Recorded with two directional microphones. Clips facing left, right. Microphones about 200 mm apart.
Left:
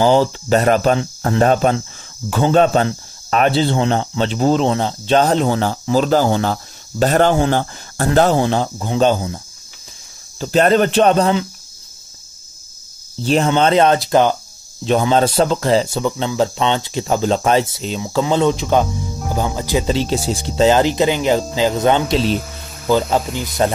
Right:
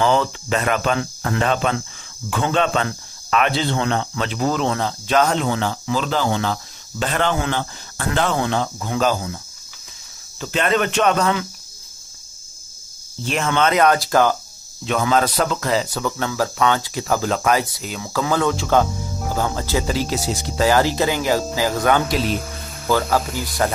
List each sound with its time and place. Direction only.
0.0 s speech: 30° left (ahead or behind)
10.4 s speech: 35° left (ahead or behind)
13.2 s speech: 30° left (ahead or behind)